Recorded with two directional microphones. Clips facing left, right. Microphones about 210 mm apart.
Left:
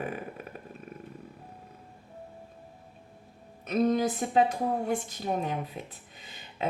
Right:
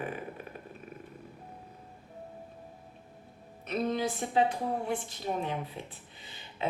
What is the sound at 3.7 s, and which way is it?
Speech, 45° left (ahead or behind).